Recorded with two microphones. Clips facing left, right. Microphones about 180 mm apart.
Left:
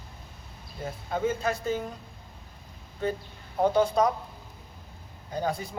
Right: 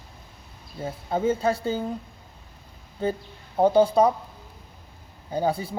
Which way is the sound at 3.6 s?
30° right (ahead or behind).